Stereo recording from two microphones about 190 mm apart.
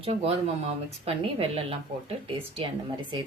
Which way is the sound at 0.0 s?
30° right (ahead or behind).